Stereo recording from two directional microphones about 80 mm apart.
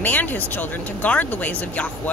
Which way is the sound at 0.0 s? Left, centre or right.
Left.